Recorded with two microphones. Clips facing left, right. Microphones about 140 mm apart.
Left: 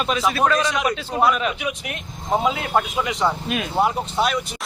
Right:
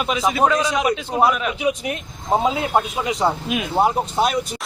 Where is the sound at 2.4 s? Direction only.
25° right (ahead or behind).